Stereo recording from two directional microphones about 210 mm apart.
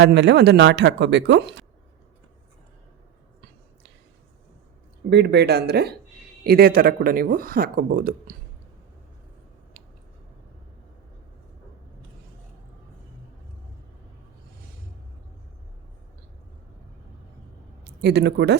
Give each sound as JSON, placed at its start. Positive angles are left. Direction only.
{"t": 0.0, "sound": "speech", "side_deg": -55}
{"t": 5.0, "sound": "speech", "side_deg": -50}
{"t": 18.0, "sound": "speech", "side_deg": -50}